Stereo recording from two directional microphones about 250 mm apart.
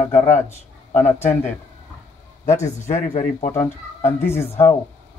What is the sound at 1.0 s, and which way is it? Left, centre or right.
Speech, centre.